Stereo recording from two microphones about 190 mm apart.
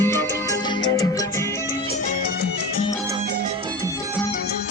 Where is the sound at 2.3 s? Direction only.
55° left (ahead or behind).